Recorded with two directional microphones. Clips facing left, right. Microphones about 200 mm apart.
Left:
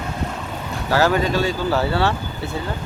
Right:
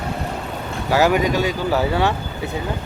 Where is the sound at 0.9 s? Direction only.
15° right (ahead or behind).